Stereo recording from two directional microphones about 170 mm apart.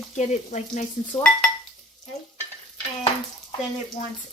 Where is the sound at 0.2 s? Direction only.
45° left (ahead or behind).